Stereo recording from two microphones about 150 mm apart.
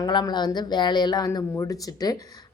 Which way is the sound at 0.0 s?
30° left (ahead or behind).